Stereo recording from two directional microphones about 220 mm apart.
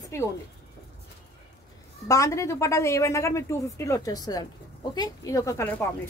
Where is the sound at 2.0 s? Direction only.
15° left (ahead or behind).